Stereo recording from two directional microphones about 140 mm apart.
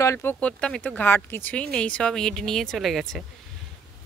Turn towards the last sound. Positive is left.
turn(degrees=0)  # may be behind; listen again after turning